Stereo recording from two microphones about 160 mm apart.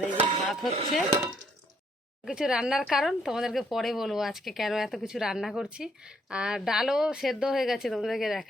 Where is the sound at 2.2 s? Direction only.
5° right (ahead or behind).